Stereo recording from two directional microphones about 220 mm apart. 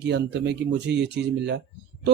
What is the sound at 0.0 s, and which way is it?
A man's voice, 50° right (ahead or behind).